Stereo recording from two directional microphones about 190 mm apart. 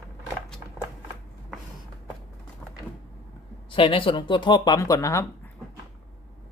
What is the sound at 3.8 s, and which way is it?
Speech, 30° left (ahead or behind).